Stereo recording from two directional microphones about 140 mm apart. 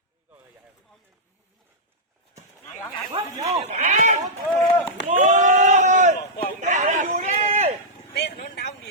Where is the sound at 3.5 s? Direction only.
55° right (ahead or behind).